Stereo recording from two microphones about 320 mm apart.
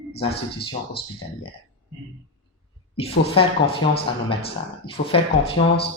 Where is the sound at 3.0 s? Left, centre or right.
Centre.